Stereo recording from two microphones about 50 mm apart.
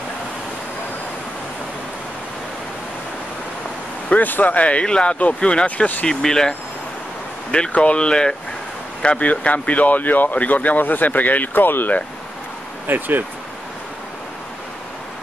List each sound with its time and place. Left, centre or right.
4.1 s speech: left; by 6.5 s centre
7.7 s speech: left
9.0 s speech: left
12.8 s speech: right